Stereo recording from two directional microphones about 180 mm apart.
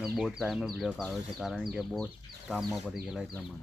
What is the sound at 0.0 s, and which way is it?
Speech, centre (ahead or behind).